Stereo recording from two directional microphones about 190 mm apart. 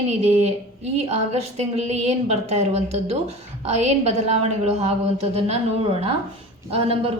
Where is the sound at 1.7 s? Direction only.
35° right (ahead or behind).